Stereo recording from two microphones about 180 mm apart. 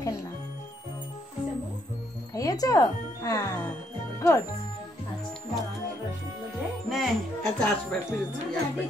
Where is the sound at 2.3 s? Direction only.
20° left (ahead or behind).